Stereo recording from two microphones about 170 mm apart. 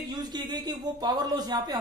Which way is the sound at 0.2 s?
25° right (ahead or behind).